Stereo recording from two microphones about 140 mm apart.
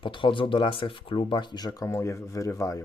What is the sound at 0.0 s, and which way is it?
Speech, 35° left (ahead or behind).